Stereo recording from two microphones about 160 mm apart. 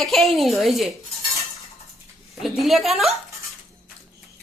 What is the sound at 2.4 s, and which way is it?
Speech, centre (ahead or behind).